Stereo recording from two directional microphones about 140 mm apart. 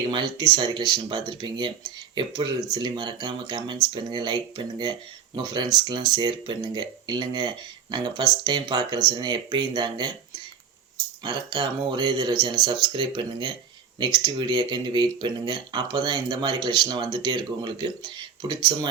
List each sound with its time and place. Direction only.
0.1 s speech: 30° right (ahead or behind)
11.2 s speech: 35° right (ahead or behind)